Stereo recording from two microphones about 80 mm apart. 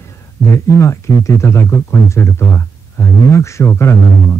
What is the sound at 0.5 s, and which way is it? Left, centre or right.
Speech, left.